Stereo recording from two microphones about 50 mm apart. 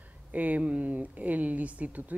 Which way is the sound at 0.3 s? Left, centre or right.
Right.